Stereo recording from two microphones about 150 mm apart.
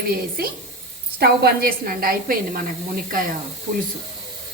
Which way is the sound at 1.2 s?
90° right.